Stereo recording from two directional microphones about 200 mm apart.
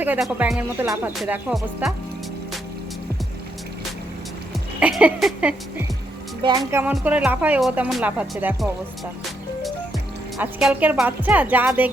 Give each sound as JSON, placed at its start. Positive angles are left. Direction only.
{"t": 0.0, "sound": "speech", "side_deg": -10}
{"t": 1.2, "sound": "music", "side_deg": -5}
{"t": 4.8, "sound": "speech", "side_deg": -5}
{"t": 10.3, "sound": "speech", "side_deg": -5}